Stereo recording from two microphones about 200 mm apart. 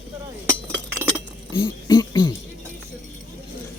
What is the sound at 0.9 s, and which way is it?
Glass, 15° right (ahead or behind).